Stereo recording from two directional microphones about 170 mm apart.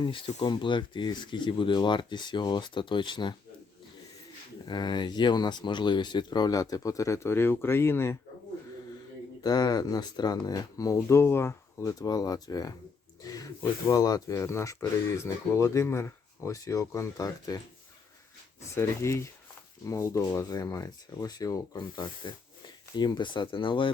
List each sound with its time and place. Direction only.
0.0 s speech: 30° left (ahead or behind)
4.7 s speech: 25° left (ahead or behind)
9.4 s speech: 25° left (ahead or behind)
18.7 s speech: 15° left (ahead or behind)